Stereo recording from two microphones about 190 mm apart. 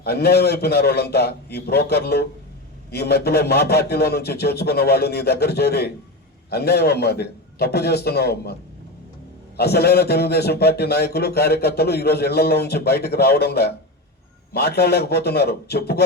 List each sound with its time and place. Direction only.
0.0 s a man's voice: 55° left (ahead or behind)
9.6 s a man's voice: 55° left (ahead or behind)